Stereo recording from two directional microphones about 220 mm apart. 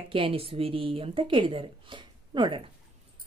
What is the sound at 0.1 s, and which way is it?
A woman's voice, 25° right (ahead or behind).